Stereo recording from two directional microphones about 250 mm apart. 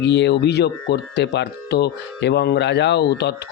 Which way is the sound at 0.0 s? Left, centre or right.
Left.